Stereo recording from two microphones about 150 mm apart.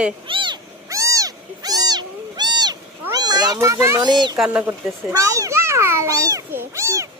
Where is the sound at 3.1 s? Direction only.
25° right (ahead or behind).